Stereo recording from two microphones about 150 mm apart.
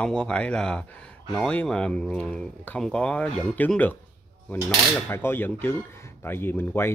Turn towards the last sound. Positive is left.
turn(degrees=15)  # may be behind; listen again after turning